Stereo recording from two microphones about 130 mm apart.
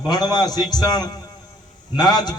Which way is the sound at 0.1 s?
30° left (ahead or behind).